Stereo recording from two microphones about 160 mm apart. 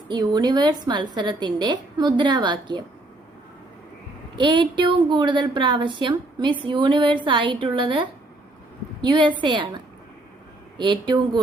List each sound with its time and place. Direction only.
0.1 s a woman's voice: 25° right (ahead or behind)
4.4 s a woman's voice: 30° right (ahead or behind)